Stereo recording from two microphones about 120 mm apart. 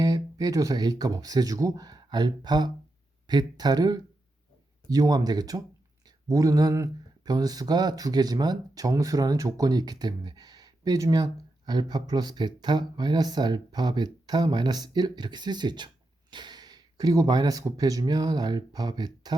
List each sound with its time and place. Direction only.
0.0 s speech: 30° right (ahead or behind)